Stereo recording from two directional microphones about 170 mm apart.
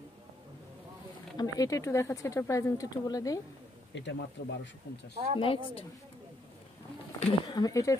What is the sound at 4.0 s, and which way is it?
Speech, 90° left.